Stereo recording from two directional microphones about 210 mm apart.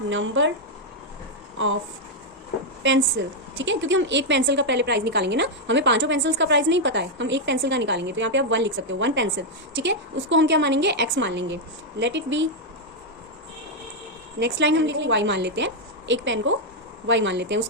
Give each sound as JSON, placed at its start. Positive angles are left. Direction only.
{"t": 0.1, "sound": "a woman's voice", "side_deg": -65}
{"t": 1.5, "sound": "speech", "side_deg": -65}
{"t": 3.2, "sound": "a woman's voice", "side_deg": -60}
{"t": 14.3, "sound": "a woman's voice", "side_deg": -60}